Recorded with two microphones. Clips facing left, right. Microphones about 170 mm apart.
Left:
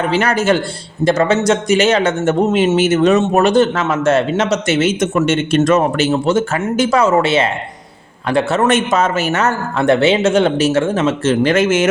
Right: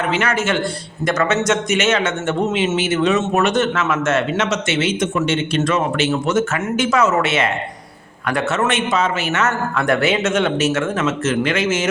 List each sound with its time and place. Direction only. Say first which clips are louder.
0.1 s speech: left 6 dB; 35° left (ahead or behind)
11.5 s a man's voice: left 6 dB; 55° left (ahead or behind)